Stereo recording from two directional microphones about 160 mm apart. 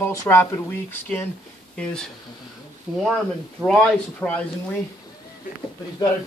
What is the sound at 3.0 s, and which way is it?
Speech, 5° left (ahead or behind).